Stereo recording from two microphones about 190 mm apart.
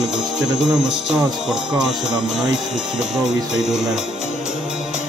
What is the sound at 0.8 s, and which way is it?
Speech, 5° right (ahead or behind).